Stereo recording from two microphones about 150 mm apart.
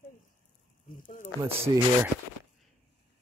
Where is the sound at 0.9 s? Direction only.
60° left (ahead or behind).